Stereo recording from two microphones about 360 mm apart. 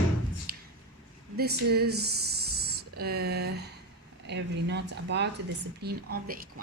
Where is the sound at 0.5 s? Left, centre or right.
Right.